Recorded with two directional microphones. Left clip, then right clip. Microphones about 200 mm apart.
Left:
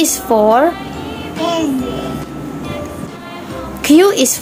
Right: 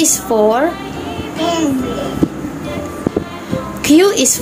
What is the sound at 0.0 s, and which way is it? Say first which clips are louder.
Speech: left 1 dB; 15° left (ahead or behind).